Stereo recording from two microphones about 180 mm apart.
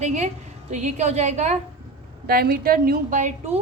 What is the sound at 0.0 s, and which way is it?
A woman's voice, 40° right (ahead or behind).